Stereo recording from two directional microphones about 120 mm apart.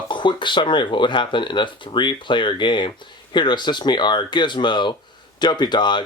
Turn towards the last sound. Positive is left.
turn(degrees=40)  # may be behind; listen again after turning